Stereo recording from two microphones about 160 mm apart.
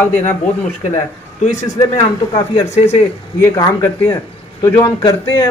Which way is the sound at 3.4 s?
20° left (ahead or behind).